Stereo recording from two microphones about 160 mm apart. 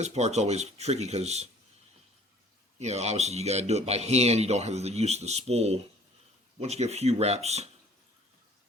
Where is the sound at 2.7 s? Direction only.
45° right (ahead or behind).